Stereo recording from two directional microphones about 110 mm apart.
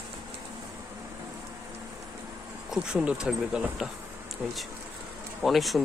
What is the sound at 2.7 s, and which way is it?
Speech, 10° right (ahead or behind).